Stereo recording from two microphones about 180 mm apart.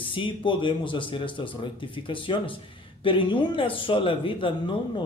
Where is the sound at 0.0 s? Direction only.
30° left (ahead or behind).